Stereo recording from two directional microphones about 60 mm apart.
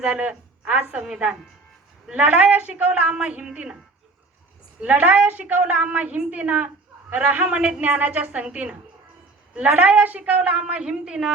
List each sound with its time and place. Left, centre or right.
0.0 s a woman's voice: centre
0.9 s a woman's voice: centre
2.1 s a woman's voice: right
4.8 s a woman's voice: right
9.6 s a woman's voice: right